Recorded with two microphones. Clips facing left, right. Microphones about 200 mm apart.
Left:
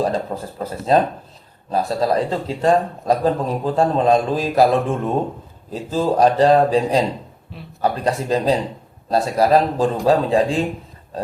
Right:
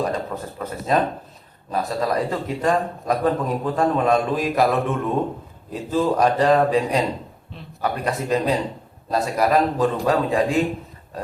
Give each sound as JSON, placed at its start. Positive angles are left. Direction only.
{"t": 0.0, "sound": "a man's voice", "side_deg": 30}